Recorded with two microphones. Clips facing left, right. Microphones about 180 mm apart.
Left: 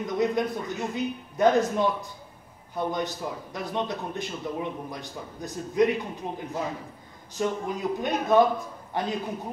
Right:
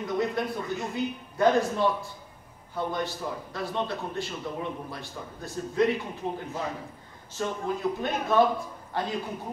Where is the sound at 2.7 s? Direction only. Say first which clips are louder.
Left 2 dB; 15° left (ahead or behind).